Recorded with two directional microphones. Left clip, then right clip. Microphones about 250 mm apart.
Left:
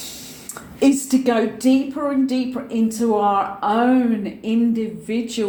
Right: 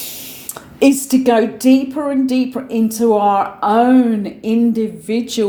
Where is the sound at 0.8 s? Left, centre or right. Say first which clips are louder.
Right 4 dB; right.